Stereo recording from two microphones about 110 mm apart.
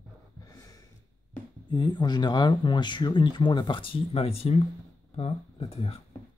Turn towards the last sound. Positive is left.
turn(degrees=65)  # may be behind; listen again after turning